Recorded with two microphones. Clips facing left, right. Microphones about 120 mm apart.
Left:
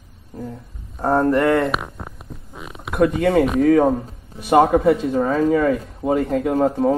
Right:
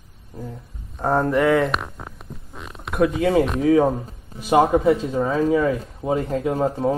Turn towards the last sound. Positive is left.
turn(degrees=0)  # may be behind; listen again after turning